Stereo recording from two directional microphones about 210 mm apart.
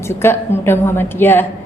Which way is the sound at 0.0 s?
10° left (ahead or behind).